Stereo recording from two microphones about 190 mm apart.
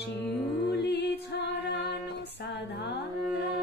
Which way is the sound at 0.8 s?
65° left (ahead or behind).